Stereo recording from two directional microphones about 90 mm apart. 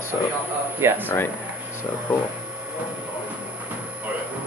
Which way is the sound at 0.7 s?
25° right (ahead or behind).